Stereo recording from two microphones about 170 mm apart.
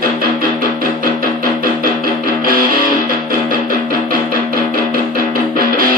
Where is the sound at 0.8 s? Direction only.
55° right (ahead or behind).